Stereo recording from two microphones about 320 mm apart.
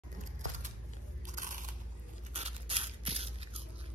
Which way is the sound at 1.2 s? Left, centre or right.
Right.